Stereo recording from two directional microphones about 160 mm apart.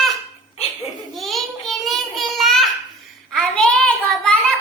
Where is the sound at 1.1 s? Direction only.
Centre (ahead or behind).